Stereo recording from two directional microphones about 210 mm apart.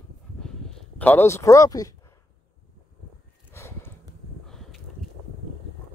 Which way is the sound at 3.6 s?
10° left (ahead or behind).